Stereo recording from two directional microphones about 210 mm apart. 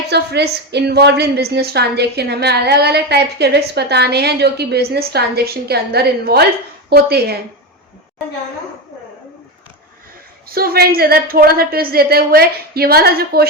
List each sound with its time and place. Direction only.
0.1 s a woman's voice: 50° right (ahead or behind)
10.5 s a woman's voice: 45° right (ahead or behind)